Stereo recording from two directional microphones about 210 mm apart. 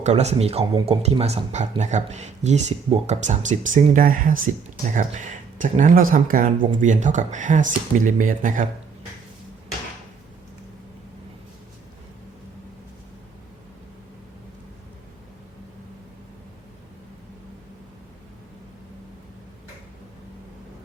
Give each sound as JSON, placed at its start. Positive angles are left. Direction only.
{"t": 0.0, "sound": "speech", "side_deg": -30}